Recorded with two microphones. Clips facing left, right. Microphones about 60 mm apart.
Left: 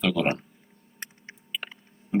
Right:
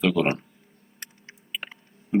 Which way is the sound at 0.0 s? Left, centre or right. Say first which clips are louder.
Right 2 dB; centre.